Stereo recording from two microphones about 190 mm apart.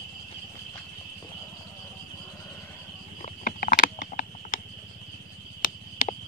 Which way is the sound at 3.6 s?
45° left (ahead or behind).